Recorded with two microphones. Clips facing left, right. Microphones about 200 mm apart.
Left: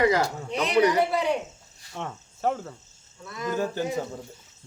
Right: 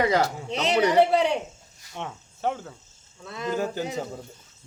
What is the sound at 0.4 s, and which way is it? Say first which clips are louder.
Speech: left 1 dB; 25° right (ahead or behind).